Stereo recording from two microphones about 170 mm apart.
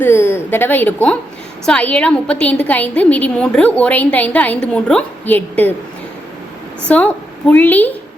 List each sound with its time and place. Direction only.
0.0 s a woman's voice: 15° left (ahead or behind)
6.8 s a woman's voice: 10° left (ahead or behind)